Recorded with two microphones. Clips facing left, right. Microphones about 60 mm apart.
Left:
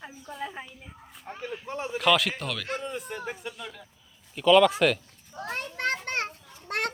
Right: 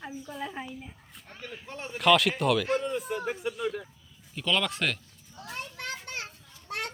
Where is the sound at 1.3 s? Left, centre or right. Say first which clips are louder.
Left 7 dB; centre.